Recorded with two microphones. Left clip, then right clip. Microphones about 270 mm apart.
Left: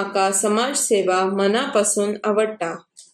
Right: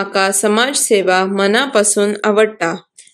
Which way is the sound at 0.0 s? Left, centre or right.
Right.